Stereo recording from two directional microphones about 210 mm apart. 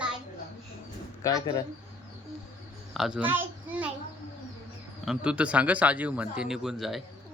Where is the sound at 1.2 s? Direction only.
15° left (ahead or behind).